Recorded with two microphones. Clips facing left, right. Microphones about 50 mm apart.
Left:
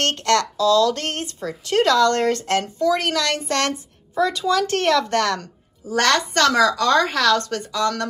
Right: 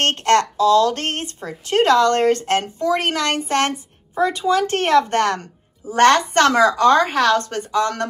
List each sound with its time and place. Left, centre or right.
0.0 s a woman's voice: right